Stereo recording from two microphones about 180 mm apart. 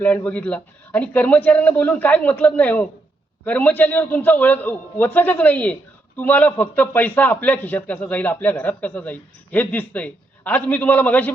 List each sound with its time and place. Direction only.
0.0 s a man's voice: 10° left (ahead or behind)